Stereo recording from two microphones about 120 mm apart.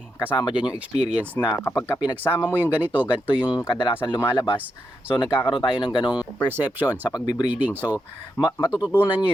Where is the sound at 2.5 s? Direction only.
15° right (ahead or behind).